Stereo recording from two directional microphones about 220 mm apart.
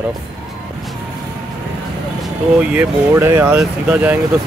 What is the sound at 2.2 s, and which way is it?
Speech, 5° right (ahead or behind).